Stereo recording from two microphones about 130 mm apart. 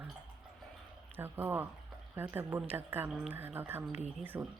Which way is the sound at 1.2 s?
15° right (ahead or behind).